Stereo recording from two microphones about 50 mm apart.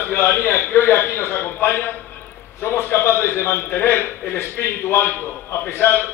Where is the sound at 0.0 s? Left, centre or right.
Left.